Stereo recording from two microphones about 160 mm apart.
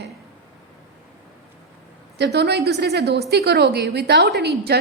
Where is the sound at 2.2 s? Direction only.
90° right.